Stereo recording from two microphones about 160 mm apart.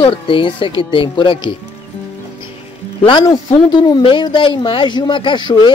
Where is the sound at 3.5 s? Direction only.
30° left (ahead or behind).